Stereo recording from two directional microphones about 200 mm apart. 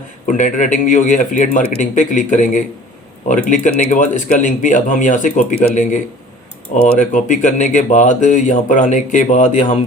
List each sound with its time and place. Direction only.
0.3 s speech: 40° left (ahead or behind)
7.0 s speech: 40° left (ahead or behind)